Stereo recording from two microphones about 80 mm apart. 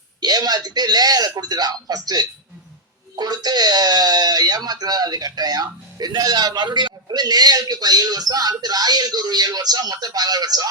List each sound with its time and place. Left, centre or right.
0.2 s speech: right